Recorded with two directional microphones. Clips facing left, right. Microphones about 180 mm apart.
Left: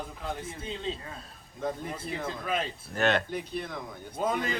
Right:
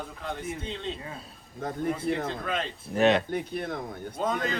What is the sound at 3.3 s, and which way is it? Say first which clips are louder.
Speech: right 4 dB; 55° right (ahead or behind).